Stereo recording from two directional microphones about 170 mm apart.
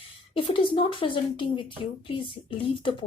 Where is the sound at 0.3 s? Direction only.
30° left (ahead or behind).